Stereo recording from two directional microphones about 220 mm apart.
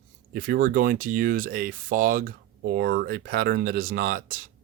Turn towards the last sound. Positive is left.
turn(degrees=-40)  # may be behind; listen again after turning